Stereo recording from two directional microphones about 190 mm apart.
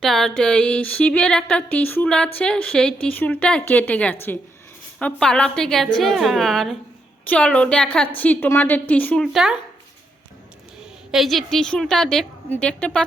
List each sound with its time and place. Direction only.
0.0 s a woman's voice: centre (ahead or behind)
11.1 s speech: centre (ahead or behind)